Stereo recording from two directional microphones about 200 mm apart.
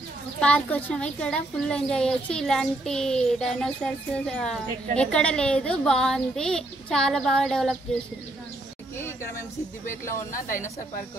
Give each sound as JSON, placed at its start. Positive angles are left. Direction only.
{"t": 0.4, "sound": "a woman's voice", "side_deg": 5}
{"t": 10.3, "sound": "speech", "side_deg": 40}